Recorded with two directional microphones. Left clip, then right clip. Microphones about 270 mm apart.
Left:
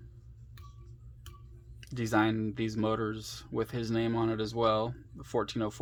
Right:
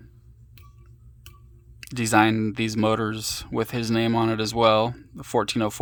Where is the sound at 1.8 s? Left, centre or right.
Right.